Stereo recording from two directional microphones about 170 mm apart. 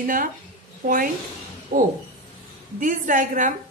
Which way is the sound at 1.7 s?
50° right (ahead or behind).